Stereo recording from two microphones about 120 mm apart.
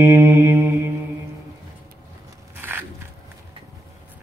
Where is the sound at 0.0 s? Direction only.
20° right (ahead or behind).